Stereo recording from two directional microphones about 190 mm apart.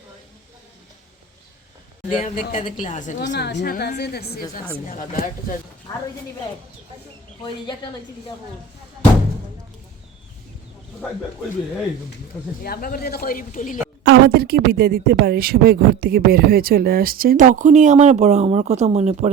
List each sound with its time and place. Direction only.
2.0 s speech: 40° left (ahead or behind)
3.2 s a woman's voice: 65° left (ahead or behind)
7.4 s speech: 25° left (ahead or behind)
12.6 s speech: 50° left (ahead or behind)
14.0 s a woman's voice: 55° right (ahead or behind); by 19.3 s 35° right (ahead or behind)